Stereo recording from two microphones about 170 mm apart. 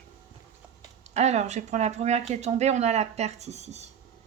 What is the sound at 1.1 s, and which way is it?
A woman's voice, 40° right (ahead or behind).